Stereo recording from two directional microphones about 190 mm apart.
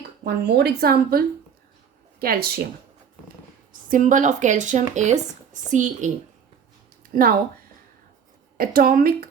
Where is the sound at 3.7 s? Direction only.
45° right (ahead or behind).